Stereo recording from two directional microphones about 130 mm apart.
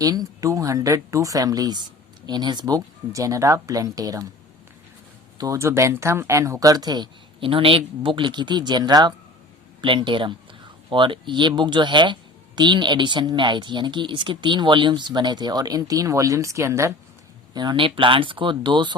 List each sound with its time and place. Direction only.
0.0 s speech: 30° right (ahead or behind)
5.4 s speech: 25° right (ahead or behind)
17.5 s speech: 35° right (ahead or behind)